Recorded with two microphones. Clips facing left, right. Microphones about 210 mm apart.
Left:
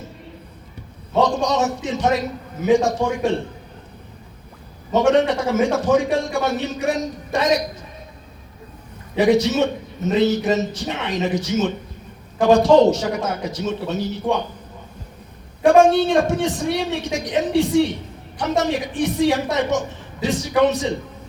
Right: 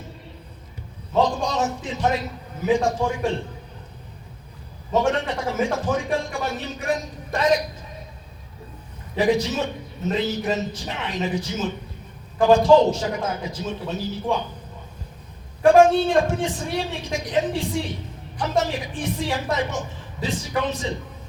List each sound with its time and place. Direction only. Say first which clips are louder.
1.1 s a man's voice: left 3 dB; 75° left (ahead or behind)
4.9 s a man's voice: left 6 dB; 75° left (ahead or behind)
9.1 s a man's voice: left 5 dB; 75° left (ahead or behind)
15.6 s a man's voice: left 1 dB; 75° left (ahead or behind)